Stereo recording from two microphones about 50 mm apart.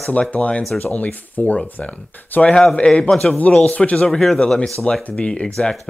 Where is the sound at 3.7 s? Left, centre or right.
Left.